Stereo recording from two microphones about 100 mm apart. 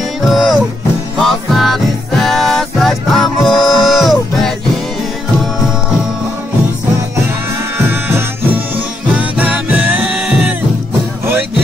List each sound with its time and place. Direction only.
0.3 s music: 5° right (ahead or behind)
7.7 s music: 20° right (ahead or behind)